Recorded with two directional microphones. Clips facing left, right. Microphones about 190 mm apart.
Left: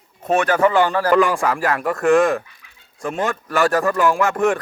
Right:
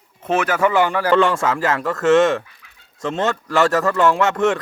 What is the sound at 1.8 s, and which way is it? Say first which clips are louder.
Speech: left 1 dB; 20° left (ahead or behind).